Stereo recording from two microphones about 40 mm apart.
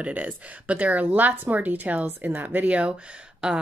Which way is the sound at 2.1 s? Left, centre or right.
Right.